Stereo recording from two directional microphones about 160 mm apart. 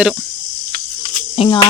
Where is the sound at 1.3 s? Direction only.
35° left (ahead or behind).